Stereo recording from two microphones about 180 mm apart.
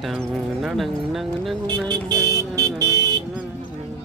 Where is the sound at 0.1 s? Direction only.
Centre (ahead or behind).